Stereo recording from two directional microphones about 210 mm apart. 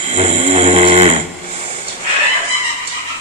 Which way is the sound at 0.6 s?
25° right (ahead or behind).